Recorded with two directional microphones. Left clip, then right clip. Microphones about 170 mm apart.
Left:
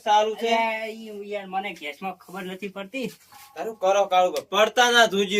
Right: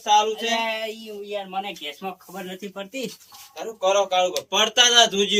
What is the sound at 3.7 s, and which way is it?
Speech, 70° left (ahead or behind).